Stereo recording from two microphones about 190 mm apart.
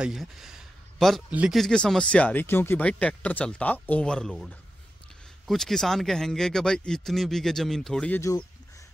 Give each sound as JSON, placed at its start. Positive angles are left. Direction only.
{"t": 0.0, "sound": "speech", "side_deg": 0}
{"t": 8.2, "sound": "speech", "side_deg": 15}